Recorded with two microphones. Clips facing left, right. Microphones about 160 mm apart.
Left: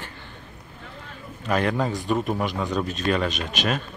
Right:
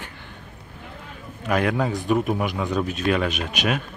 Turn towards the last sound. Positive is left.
turn(degrees=-10)  # may be behind; listen again after turning